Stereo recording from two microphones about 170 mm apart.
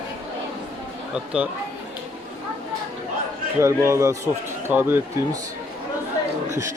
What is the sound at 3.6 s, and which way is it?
Speech, 15° right (ahead or behind).